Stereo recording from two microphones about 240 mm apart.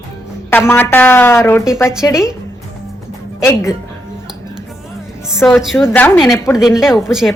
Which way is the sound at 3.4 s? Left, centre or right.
Centre.